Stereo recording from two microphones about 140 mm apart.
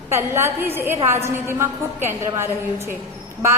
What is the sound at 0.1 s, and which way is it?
A woman's voice, 20° right (ahead or behind).